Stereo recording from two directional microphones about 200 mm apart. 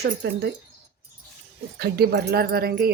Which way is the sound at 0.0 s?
55° right (ahead or behind).